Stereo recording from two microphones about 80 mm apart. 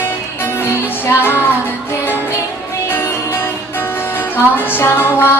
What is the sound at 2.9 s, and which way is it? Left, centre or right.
Music, left.